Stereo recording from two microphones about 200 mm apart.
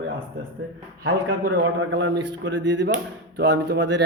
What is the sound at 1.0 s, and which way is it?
A man's voice, 60° right (ahead or behind).